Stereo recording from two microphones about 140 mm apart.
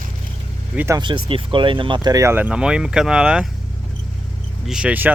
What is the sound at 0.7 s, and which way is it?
Speech, 15° right (ahead or behind).